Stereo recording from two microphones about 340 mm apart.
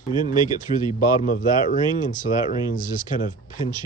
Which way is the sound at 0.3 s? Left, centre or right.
Centre.